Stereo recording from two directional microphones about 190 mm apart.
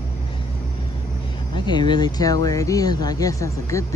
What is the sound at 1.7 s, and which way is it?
Speech, 25° left (ahead or behind).